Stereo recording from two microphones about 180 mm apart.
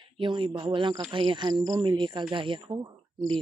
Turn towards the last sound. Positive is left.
turn(degrees=-25)  # may be behind; listen again after turning